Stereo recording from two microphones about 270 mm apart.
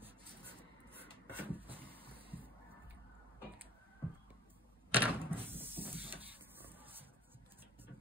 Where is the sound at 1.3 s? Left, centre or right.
Centre.